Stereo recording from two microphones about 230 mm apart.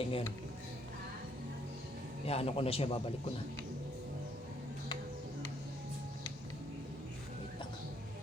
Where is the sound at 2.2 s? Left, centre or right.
Left.